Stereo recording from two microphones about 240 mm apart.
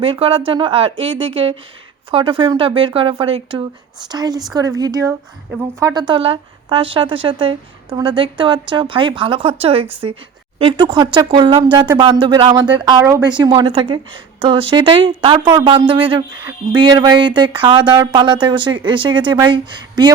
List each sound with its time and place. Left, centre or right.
0.0 s a woman's voice: right